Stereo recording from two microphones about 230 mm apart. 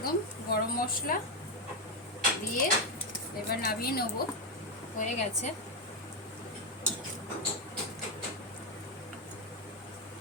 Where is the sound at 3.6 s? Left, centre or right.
Left.